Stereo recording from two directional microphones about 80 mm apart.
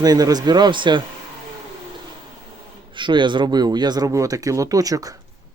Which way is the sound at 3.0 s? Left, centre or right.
Right.